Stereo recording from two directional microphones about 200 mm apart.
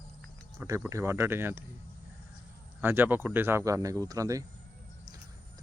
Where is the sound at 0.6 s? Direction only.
15° right (ahead or behind).